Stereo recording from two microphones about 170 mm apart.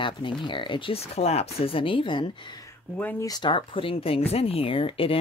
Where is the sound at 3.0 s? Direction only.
10° left (ahead or behind).